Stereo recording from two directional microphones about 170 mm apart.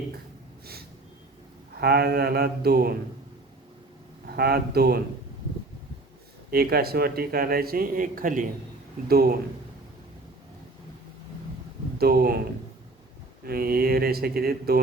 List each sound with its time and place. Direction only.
1.8 s mantra: 65° right (ahead or behind)
4.3 s speech: 65° right (ahead or behind)
6.5 s speech: 65° right (ahead or behind)
9.0 s mantra: 65° right (ahead or behind)
11.9 s mantra: 65° right (ahead or behind)
13.4 s speech: 65° right (ahead or behind)